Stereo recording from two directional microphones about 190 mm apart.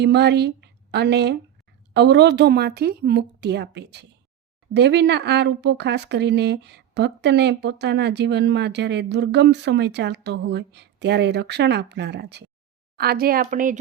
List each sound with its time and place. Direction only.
0.0 s a woman's voice: 60° right (ahead or behind); by 13.7 s 45° right (ahead or behind)